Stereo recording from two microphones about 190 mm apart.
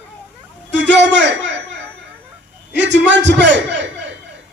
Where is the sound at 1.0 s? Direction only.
65° right (ahead or behind).